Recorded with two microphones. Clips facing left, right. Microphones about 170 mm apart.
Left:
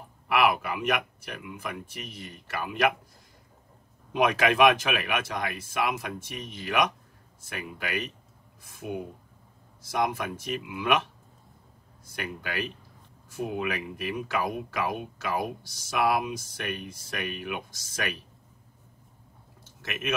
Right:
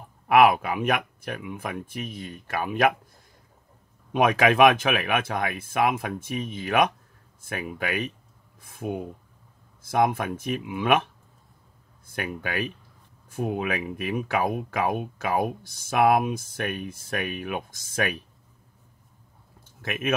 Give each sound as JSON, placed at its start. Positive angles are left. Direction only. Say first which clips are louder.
{"t": 0.3, "sound": "speech", "louder": "right 6 dB", "side_deg": -50}
{"t": 4.1, "sound": "speech", "louder": "right 3 dB", "side_deg": -55}
{"t": 12.1, "sound": "speech", "louder": "right 4 dB", "side_deg": -50}
{"t": 19.8, "sound": "speech", "louder": "right 5 dB", "side_deg": -50}